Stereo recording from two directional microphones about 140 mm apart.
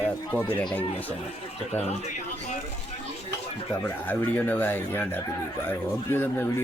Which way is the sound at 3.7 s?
10° left (ahead or behind).